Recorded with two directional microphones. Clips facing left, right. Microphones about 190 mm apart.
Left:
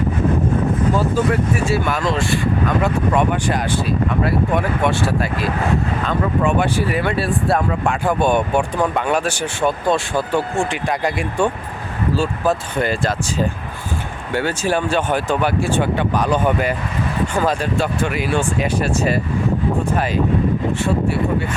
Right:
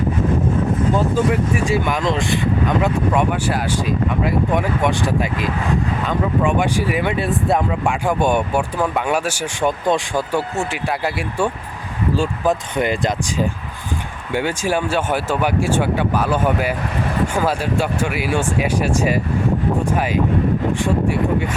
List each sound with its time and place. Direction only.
0.9 s speech: 15° right (ahead or behind)
3.2 s speech: 10° right (ahead or behind)